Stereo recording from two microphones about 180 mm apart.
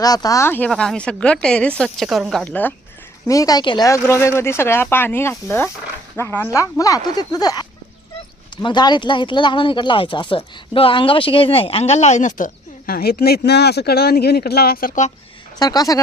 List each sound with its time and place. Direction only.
0.0 s a woman's voice: 20° left (ahead or behind)
3.2 s a woman's voice: 20° left (ahead or behind)
8.6 s speech: 25° left (ahead or behind); by 15.1 s 45° left (ahead or behind)
15.5 s speech: 20° left (ahead or behind)